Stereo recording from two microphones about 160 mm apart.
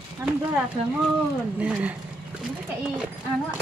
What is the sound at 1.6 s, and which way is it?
Speech, 10° right (ahead or behind).